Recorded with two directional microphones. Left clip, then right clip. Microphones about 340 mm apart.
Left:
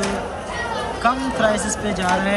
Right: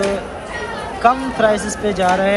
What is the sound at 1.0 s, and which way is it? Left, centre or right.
Speech, centre.